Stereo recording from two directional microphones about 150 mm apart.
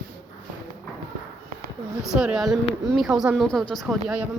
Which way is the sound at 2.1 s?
5° right (ahead or behind).